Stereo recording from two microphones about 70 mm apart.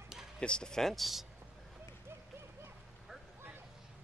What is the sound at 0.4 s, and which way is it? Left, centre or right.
Speech, centre.